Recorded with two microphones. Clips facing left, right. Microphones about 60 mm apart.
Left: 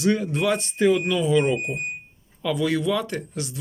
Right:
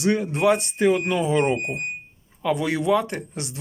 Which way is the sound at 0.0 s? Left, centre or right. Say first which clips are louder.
Right 2 dB; right.